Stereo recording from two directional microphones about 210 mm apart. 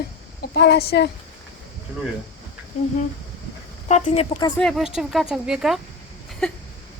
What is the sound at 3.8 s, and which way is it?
Speech, 30° left (ahead or behind).